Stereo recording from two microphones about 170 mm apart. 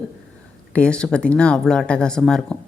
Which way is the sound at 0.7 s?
5° left (ahead or behind).